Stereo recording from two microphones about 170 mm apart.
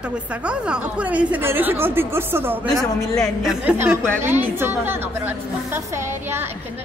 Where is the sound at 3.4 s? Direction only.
5° right (ahead or behind).